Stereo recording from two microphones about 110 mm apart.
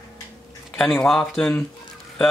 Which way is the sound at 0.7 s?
5° left (ahead or behind).